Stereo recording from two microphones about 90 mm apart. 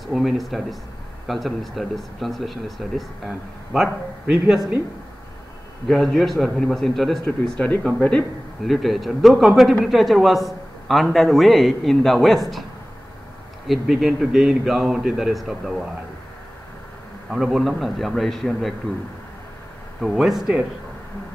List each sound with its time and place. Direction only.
0.0 s a man's voice: centre (ahead or behind)
5.9 s a man's voice: centre (ahead or behind)
8.6 s a man's voice: centre (ahead or behind)
13.7 s a man's voice: centre (ahead or behind)
17.3 s a man's voice: centre (ahead or behind)
20.0 s a man's voice: centre (ahead or behind)